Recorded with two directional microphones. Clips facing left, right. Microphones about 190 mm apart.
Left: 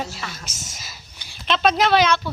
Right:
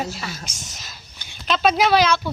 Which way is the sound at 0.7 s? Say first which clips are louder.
Even; 5° left (ahead or behind).